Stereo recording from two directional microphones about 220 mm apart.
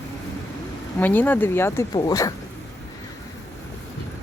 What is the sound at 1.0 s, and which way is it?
Speech, 10° left (ahead or behind).